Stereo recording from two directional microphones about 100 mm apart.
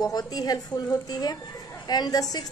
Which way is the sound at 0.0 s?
40° left (ahead or behind).